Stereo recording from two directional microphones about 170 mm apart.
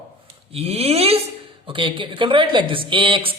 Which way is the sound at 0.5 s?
35° right (ahead or behind).